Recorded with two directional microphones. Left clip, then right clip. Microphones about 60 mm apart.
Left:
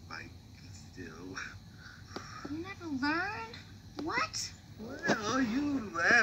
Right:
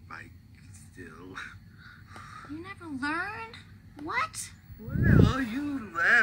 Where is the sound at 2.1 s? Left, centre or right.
Centre.